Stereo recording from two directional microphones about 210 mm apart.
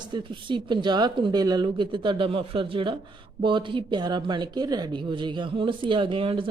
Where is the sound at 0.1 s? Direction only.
20° right (ahead or behind).